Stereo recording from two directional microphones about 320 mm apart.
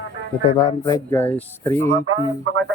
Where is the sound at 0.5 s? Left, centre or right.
Centre.